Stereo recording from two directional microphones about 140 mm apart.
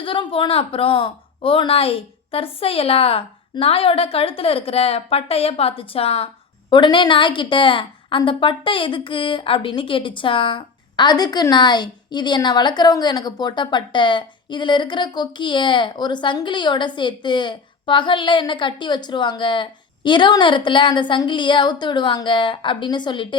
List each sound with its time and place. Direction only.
0.0 s speech: 40° left (ahead or behind)